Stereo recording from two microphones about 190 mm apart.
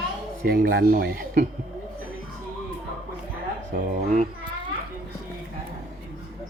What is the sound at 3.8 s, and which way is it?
Speech, 35° right (ahead or behind).